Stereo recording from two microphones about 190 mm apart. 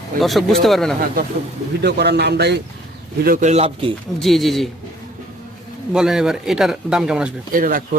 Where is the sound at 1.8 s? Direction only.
60° right (ahead or behind).